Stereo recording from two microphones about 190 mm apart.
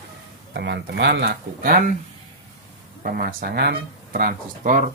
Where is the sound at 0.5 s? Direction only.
60° right (ahead or behind).